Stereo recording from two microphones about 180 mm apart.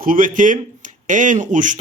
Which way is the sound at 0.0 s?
50° right (ahead or behind).